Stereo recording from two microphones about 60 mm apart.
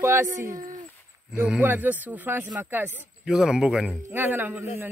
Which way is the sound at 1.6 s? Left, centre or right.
Right.